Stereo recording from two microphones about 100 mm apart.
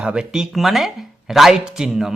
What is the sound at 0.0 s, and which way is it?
A man's voice, 10° right (ahead or behind).